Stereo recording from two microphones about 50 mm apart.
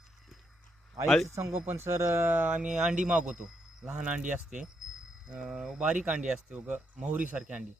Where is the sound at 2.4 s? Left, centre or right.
Right.